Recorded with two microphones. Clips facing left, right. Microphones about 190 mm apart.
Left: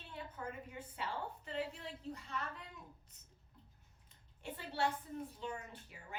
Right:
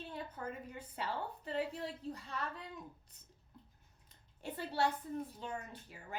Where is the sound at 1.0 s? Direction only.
40° right (ahead or behind).